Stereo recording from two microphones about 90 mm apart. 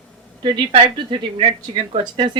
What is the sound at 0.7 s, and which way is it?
A woman's voice, 70° right (ahead or behind).